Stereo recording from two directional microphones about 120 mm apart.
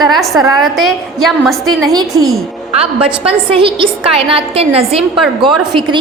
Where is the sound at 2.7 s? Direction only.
55° right (ahead or behind).